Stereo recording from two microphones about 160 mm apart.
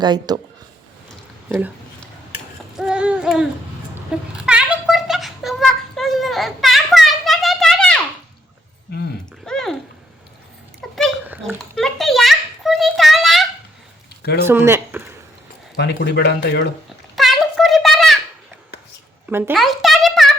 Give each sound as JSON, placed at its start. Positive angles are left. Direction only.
{"t": 0.0, "sound": "speech", "side_deg": -25}
{"t": 1.5, "sound": "speech", "side_deg": -15}
{"t": 2.7, "sound": "a sound", "side_deg": -5}
{"t": 9.5, "sound": "bathtub", "side_deg": 5}
{"t": 10.8, "sound": "dog", "side_deg": 5}
{"t": 11.4, "sound": "a child's voice", "side_deg": 0}
{"t": 14.2, "sound": "a sound", "side_deg": 85}
{"t": 14.4, "sound": "speech", "side_deg": -15}
{"t": 15.7, "sound": "speech", "side_deg": 80}
{"t": 17.2, "sound": "a sound", "side_deg": 0}
{"t": 19.3, "sound": "speech", "side_deg": -15}
{"t": 19.5, "sound": "a sound", "side_deg": 0}